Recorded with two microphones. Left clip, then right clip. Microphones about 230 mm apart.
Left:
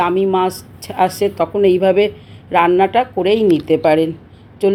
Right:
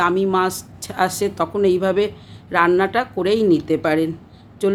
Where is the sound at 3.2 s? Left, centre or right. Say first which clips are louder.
Left 3 dB; right.